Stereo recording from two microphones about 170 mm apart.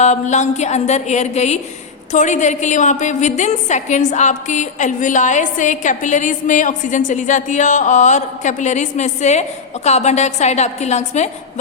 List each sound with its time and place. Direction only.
0.0 s a woman's voice: 45° left (ahead or behind)